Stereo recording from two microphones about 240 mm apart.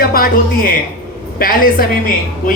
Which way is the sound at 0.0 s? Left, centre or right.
Left.